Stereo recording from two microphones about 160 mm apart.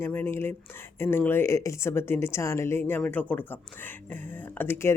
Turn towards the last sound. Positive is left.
turn(degrees=15)  # may be behind; listen again after turning